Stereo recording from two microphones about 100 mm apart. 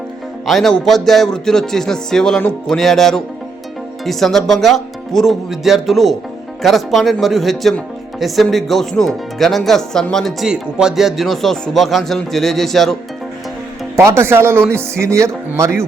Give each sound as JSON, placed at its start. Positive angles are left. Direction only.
{"t": 0.4, "sound": "speech", "side_deg": 5}
{"t": 10.4, "sound": "speech", "side_deg": -5}
{"t": 13.9, "sound": "speech", "side_deg": -25}